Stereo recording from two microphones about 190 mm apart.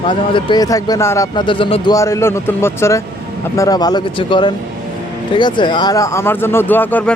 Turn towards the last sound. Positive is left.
turn(degrees=10)  # may be behind; listen again after turning